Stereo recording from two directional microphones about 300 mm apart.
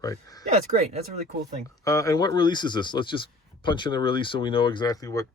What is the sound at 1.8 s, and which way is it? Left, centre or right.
Speech, centre.